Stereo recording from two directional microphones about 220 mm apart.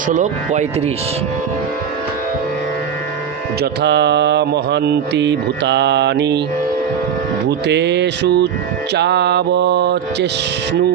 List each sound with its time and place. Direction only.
0.1 s speech: 35° right (ahead or behind)
3.6 s mantra: 50° right (ahead or behind)
7.7 s mantra: 50° right (ahead or behind)